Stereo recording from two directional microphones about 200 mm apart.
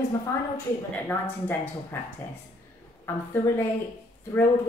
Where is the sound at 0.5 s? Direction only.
10° left (ahead or behind).